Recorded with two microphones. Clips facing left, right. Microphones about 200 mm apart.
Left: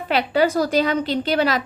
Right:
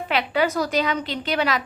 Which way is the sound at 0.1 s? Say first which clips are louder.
Left 4 dB; 40° left (ahead or behind).